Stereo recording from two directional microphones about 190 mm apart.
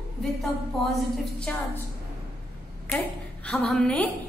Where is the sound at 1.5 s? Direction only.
5° left (ahead or behind).